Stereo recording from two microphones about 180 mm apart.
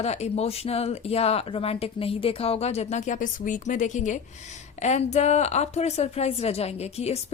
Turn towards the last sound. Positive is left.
turn(degrees=35)  # may be behind; listen again after turning